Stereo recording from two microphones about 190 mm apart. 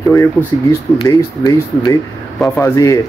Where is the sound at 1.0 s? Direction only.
20° left (ahead or behind).